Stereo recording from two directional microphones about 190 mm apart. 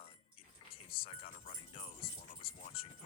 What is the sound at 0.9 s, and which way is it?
Speech, 30° left (ahead or behind).